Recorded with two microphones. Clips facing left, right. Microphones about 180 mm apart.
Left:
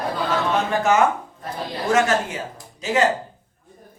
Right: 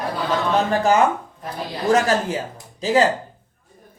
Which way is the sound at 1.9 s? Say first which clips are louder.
Right 1 dB; 35° right (ahead or behind).